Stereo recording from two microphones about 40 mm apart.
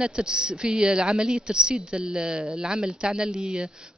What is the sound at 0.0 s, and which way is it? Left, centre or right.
Speech, centre.